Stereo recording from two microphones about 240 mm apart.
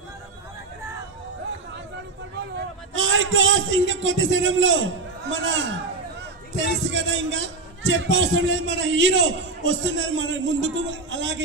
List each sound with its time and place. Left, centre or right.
2.9 s a man's voice: right